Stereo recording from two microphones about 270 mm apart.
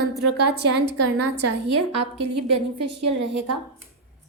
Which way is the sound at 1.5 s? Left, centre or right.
Right.